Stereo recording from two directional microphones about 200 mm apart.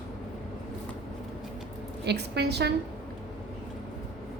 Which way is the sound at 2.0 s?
55° right (ahead or behind).